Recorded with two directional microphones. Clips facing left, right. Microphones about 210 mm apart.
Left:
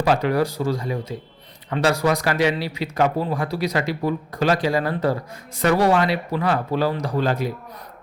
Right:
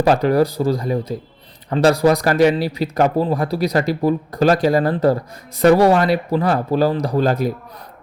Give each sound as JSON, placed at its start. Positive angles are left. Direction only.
{"t": 0.0, "sound": "speech", "side_deg": -40}